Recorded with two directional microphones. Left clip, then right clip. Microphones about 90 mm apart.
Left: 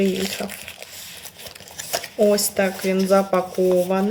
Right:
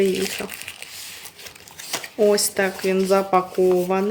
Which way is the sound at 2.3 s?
75° right (ahead or behind).